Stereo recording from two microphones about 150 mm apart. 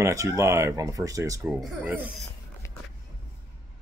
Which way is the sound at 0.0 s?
20° right (ahead or behind).